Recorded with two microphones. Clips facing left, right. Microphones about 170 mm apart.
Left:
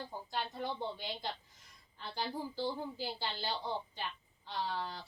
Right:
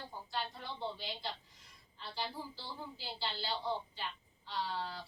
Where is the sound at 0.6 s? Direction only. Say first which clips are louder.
Left 3 dB; 50° left (ahead or behind).